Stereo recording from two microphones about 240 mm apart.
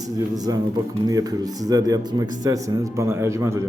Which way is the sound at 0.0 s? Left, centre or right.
Centre.